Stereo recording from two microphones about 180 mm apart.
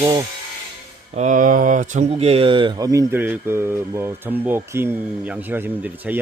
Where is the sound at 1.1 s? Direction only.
45° right (ahead or behind).